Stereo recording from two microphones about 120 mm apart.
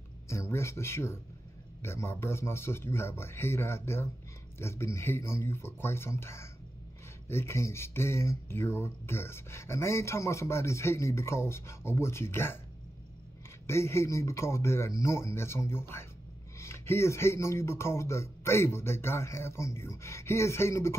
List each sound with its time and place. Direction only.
0.3 s speech: 20° left (ahead or behind)
13.7 s speech: 20° left (ahead or behind)